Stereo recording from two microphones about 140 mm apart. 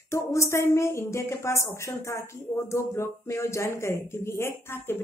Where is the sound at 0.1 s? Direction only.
20° left (ahead or behind).